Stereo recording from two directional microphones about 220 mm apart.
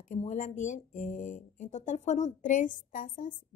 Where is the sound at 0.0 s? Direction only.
35° left (ahead or behind).